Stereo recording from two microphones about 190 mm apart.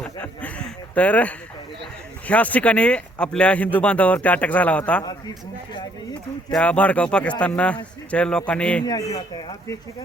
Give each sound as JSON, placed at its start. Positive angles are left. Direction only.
{"t": 0.0, "sound": "a sound", "side_deg": 5}
{"t": 2.2, "sound": "speech", "side_deg": 10}
{"t": 6.5, "sound": "speech", "side_deg": 5}
{"t": 8.8, "sound": "speech", "side_deg": 20}